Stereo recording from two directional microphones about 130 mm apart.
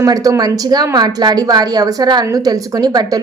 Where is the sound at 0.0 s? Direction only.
25° right (ahead or behind).